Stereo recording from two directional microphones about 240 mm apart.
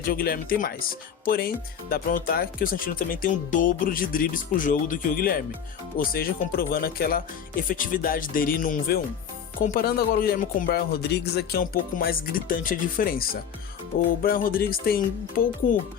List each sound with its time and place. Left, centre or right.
0.0 s speech: left